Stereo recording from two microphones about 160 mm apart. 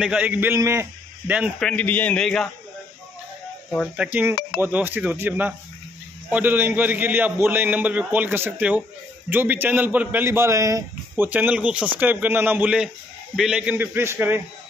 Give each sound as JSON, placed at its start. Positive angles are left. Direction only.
{"t": 0.0, "sound": "a man's voice", "side_deg": -10}
{"t": 1.6, "sound": "a man's voice", "side_deg": 5}
{"t": 3.9, "sound": "a man's voice", "side_deg": -10}